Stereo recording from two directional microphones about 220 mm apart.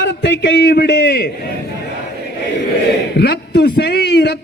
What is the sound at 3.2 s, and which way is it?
A man's voice, 45° left (ahead or behind).